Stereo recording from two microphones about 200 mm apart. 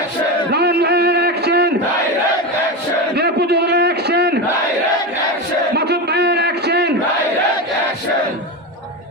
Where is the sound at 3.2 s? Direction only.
55° right (ahead or behind).